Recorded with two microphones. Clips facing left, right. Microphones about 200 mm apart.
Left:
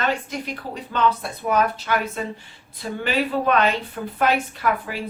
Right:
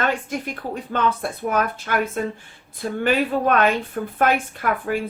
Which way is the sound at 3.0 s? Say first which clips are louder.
Right 2 dB; 50° right (ahead or behind).